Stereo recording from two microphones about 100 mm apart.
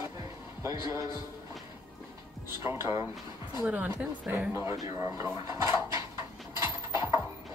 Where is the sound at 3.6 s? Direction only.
15° right (ahead or behind).